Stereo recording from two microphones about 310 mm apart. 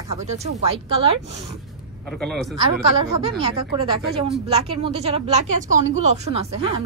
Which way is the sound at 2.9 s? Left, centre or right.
Centre.